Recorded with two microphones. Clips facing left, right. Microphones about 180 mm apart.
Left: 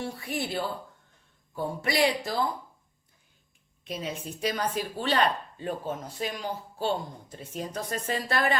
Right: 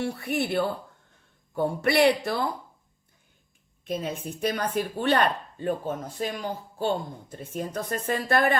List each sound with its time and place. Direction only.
0.0 s speech: 60° right (ahead or behind)
3.8 s speech: 55° right (ahead or behind)